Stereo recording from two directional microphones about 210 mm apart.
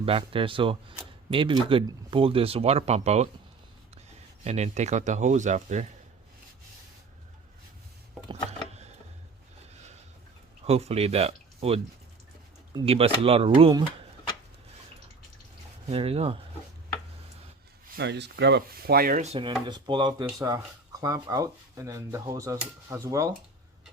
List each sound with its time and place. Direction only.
0.0 s speech: 25° right (ahead or behind)
4.4 s speech: 30° right (ahead or behind)
10.7 s speech: 30° right (ahead or behind)
15.9 s speech: 30° right (ahead or behind)
17.9 s speech: 55° right (ahead or behind)
19.2 s speech: 25° right (ahead or behind)